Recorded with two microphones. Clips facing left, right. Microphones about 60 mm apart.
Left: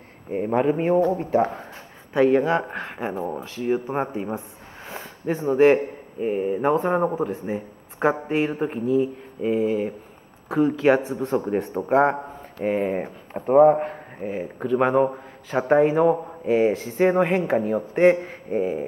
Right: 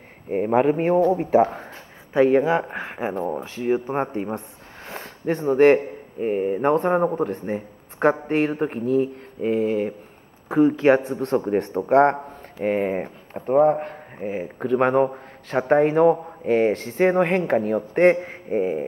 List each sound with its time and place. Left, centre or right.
0.5 s speech: centre
3.8 s speech: centre
7.1 s speech: centre
14.2 s speech: centre